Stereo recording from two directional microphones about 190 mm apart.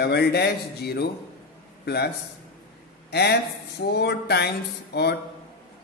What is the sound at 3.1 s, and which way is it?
A man's voice, 60° left (ahead or behind).